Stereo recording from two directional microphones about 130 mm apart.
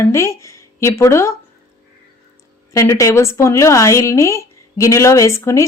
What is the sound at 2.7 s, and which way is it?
A woman's voice, 25° left (ahead or behind).